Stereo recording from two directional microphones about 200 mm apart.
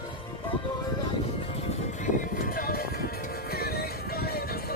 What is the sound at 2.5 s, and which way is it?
Music, 45° left (ahead or behind).